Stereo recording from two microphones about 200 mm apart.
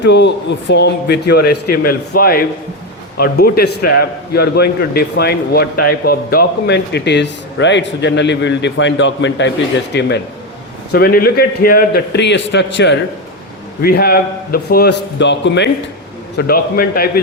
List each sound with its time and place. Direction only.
0.0 s a man's voice: 60° left (ahead or behind)
13.8 s a man's voice: 50° left (ahead or behind)
16.4 s a man's voice: 50° left (ahead or behind)